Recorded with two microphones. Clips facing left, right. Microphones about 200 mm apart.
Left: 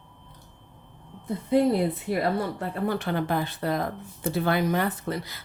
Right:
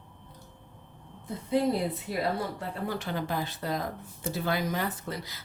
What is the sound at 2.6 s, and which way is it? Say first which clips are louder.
Speech: left 6 dB; 60° left (ahead or behind).